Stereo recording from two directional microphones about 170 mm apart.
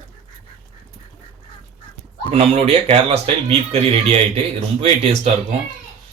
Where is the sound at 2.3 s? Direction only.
35° right (ahead or behind).